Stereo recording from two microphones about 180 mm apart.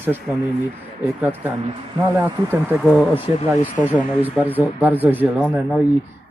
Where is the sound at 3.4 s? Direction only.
40° left (ahead or behind).